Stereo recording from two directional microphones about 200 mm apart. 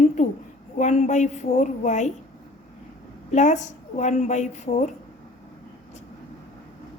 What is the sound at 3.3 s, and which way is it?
A woman's voice, 35° left (ahead or behind).